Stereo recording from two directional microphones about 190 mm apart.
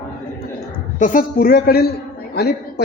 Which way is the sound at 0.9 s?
40° left (ahead or behind).